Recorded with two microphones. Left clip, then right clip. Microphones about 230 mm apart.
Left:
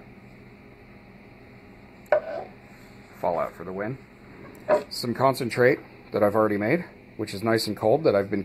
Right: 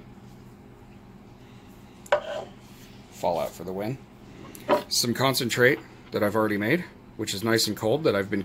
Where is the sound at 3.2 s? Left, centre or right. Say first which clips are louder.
Even; centre.